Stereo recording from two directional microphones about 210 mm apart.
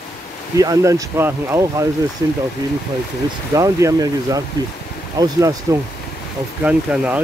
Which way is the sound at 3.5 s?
15° right (ahead or behind).